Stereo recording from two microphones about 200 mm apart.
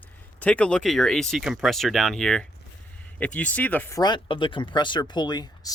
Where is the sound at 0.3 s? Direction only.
5° left (ahead or behind).